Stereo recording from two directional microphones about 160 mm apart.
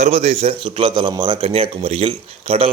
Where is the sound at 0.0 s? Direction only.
40° right (ahead or behind).